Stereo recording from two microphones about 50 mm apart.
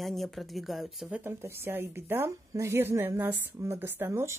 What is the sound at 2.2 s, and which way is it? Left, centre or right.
Speech, right.